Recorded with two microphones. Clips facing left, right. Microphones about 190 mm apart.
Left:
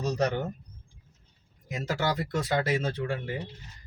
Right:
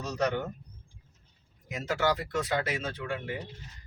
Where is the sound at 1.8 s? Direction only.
35° left (ahead or behind).